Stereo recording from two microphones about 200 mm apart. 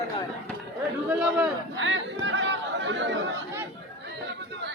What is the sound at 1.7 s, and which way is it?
Chatter, 75° right (ahead or behind).